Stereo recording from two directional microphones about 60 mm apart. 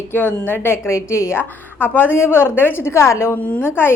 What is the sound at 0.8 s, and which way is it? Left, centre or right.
Speech, left.